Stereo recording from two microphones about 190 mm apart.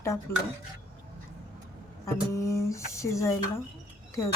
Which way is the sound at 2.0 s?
15° left (ahead or behind).